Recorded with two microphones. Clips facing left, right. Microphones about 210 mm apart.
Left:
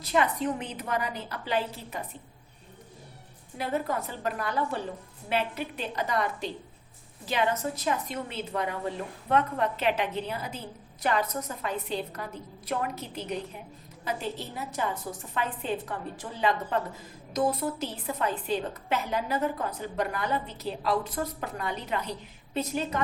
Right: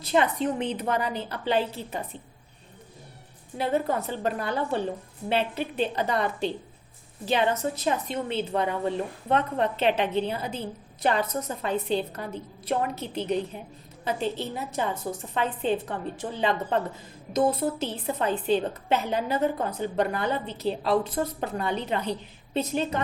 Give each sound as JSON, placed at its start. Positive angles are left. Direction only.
{"t": 0.1, "sound": "a woman's voice", "side_deg": -25}
{"t": 3.6, "sound": "a woman's voice", "side_deg": -25}